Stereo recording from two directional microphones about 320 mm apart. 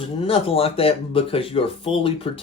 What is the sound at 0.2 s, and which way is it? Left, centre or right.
Speech, centre.